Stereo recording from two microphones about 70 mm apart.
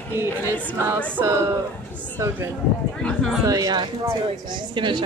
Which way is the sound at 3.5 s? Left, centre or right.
Right.